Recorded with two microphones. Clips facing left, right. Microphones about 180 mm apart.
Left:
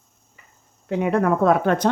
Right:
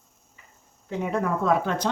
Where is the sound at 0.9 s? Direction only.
70° left (ahead or behind).